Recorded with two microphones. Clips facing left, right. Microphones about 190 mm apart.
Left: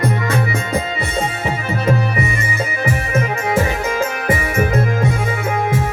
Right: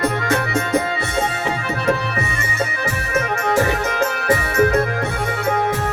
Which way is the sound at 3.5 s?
65° right (ahead or behind).